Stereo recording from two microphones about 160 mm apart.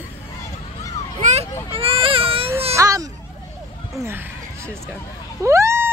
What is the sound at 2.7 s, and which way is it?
Baby cry, 20° right (ahead or behind).